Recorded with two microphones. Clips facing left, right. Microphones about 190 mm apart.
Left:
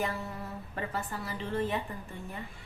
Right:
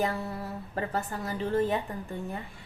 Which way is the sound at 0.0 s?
35° right (ahead or behind).